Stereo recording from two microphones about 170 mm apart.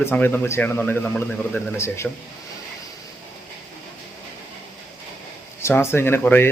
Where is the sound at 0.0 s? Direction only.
10° left (ahead or behind).